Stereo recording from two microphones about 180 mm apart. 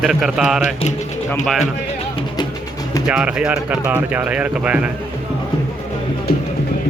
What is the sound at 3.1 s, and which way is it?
Speech, 5° right (ahead or behind).